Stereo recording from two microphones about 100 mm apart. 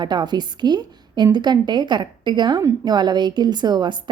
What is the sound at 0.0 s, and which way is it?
Speech, 45° right (ahead or behind).